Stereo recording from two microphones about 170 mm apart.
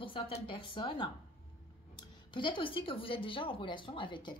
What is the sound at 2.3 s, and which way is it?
Speech, 30° left (ahead or behind).